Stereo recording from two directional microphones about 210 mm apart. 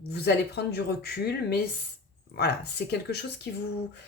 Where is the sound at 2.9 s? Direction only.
50° left (ahead or behind).